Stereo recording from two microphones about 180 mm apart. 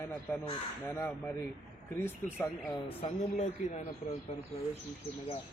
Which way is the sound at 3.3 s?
40° left (ahead or behind).